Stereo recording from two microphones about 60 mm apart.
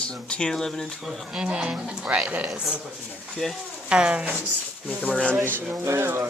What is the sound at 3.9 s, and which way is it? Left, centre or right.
Speech, centre.